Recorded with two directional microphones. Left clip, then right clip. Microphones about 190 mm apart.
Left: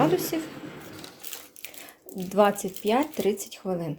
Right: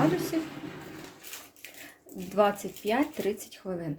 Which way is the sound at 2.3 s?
30° left (ahead or behind).